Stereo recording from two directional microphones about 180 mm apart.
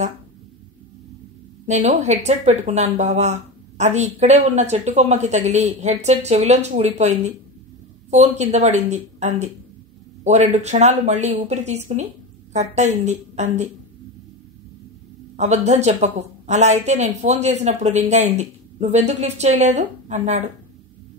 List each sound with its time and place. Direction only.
1.7 s speech: 40° right (ahead or behind)
15.3 s speech: 40° right (ahead or behind)